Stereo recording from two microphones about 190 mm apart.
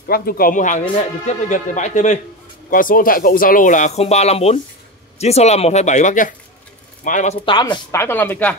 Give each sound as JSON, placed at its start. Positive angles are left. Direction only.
{"t": 0.0, "sound": "speech", "side_deg": 50}
{"t": 7.3, "sound": "speech", "side_deg": 25}
{"t": 8.0, "sound": "speech", "side_deg": 10}